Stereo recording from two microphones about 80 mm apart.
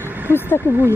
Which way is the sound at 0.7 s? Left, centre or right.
Left.